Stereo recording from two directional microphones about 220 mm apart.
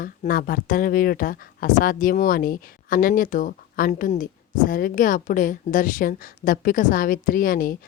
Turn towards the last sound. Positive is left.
turn(degrees=40)  # may be behind; listen again after turning